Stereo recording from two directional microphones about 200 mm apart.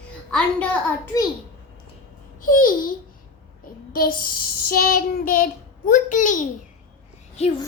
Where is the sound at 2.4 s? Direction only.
45° left (ahead or behind).